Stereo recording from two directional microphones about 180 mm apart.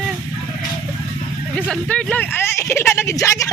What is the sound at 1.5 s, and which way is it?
Speech, 5° left (ahead or behind).